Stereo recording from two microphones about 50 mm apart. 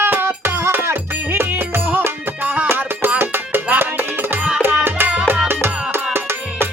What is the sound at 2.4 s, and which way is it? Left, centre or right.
Music, right.